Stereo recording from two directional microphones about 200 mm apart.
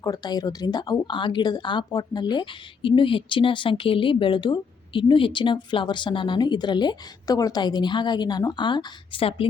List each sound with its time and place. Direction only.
0.0 s speech: 20° left (ahead or behind)